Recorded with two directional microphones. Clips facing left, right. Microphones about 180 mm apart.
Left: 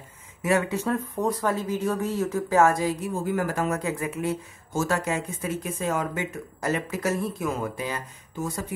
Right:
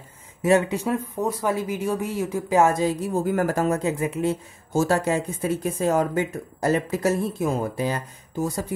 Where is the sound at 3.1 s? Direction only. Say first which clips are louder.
Right 4 dB; 40° right (ahead or behind).